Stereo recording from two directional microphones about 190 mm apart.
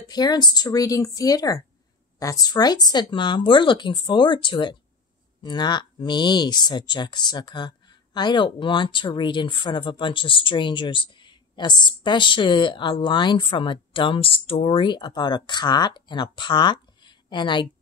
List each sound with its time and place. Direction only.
0.1 s speech: 20° left (ahead or behind)